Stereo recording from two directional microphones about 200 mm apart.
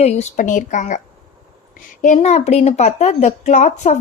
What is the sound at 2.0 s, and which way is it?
A woman's voice, 35° left (ahead or behind).